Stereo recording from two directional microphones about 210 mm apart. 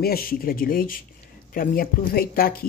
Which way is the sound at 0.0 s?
45° left (ahead or behind).